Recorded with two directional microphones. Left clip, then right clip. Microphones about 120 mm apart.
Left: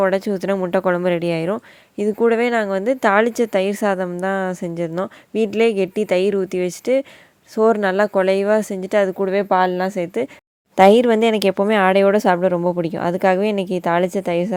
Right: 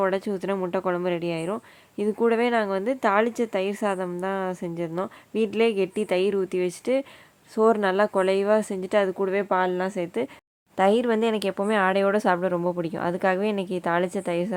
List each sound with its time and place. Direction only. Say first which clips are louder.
0.0 s a woman's voice: left 7 dB; 40° left (ahead or behind)
10.8 s a woman's voice: left 9 dB; 55° left (ahead or behind)